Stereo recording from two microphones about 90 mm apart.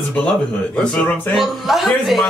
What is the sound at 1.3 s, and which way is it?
Speech, centre (ahead or behind).